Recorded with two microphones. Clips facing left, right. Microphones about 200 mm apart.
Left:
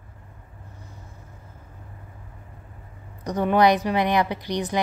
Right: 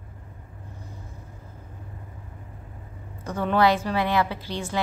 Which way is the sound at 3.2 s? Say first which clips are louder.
Left 3 dB; 15° left (ahead or behind).